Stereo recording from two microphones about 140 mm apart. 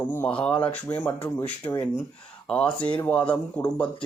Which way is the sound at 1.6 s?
25° left (ahead or behind).